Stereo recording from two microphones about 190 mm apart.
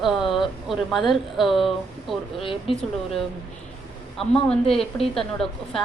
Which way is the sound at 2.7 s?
30° left (ahead or behind).